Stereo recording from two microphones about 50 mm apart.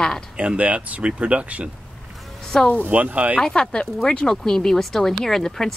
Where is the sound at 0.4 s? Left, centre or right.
Right.